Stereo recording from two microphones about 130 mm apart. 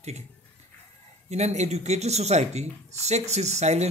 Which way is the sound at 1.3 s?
60° right (ahead or behind).